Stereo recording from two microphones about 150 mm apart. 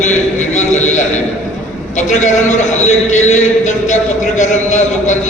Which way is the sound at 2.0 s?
55° left (ahead or behind).